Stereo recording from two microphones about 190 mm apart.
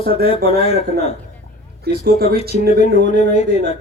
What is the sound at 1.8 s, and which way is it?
Speech, 50° right (ahead or behind).